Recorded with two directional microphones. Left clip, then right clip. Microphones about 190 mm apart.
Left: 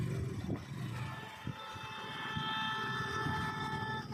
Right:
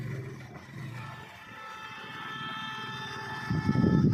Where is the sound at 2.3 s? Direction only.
55° right (ahead or behind).